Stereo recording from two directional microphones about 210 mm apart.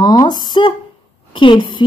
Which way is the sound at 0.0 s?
20° left (ahead or behind).